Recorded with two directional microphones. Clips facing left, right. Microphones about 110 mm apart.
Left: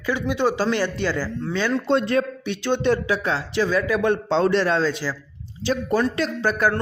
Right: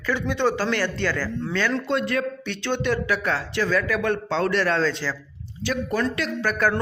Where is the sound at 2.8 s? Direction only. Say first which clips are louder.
Left 2 dB; 25° left (ahead or behind).